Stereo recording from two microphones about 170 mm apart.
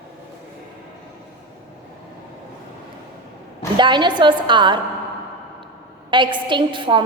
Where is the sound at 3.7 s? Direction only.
25° right (ahead or behind).